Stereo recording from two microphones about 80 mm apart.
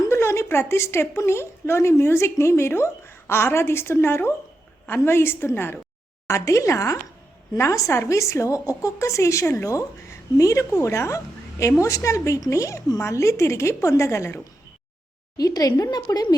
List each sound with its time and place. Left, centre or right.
0.1 s a woman's voice: left
6.2 s a woman's voice: left
15.4 s speech: left